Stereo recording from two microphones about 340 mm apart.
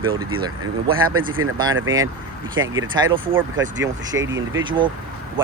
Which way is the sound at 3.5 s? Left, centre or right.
Right.